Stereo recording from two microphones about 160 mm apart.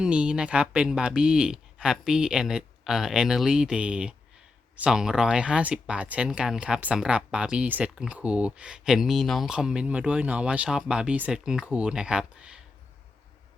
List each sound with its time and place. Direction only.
0.0 s speech: 5° right (ahead or behind)